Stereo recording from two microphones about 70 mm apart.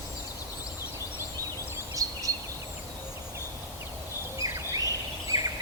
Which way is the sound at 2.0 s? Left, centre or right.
Right.